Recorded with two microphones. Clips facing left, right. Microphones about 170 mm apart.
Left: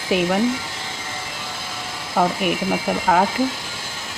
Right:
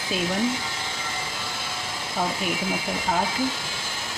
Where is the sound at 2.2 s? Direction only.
70° left (ahead or behind).